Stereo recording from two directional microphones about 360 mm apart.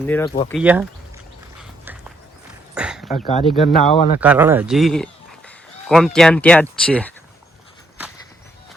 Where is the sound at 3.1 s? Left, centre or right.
Centre.